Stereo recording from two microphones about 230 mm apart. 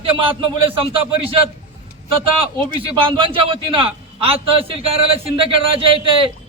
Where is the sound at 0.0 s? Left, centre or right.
Right.